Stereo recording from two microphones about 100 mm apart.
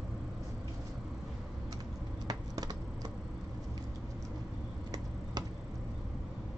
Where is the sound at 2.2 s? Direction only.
40° right (ahead or behind).